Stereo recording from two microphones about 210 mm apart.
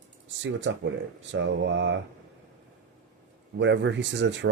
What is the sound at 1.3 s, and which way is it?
Speech, 60° right (ahead or behind).